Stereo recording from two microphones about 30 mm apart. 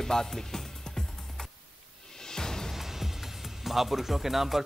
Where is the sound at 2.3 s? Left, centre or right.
Centre.